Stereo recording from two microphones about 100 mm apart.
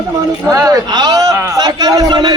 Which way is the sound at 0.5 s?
35° right (ahead or behind).